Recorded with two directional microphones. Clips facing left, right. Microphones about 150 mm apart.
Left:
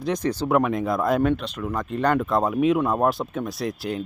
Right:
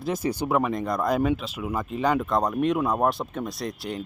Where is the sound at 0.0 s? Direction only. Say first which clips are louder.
Left 2 dB; 5° right (ahead or behind).